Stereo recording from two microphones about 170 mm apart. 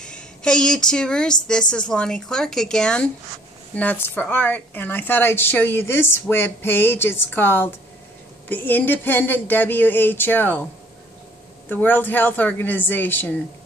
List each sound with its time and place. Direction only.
0.0 s a woman's voice: 5° left (ahead or behind)
11.7 s speech: 10° left (ahead or behind)